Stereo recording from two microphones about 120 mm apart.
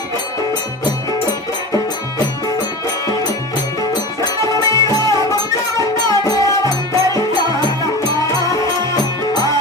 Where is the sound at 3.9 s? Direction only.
35° left (ahead or behind).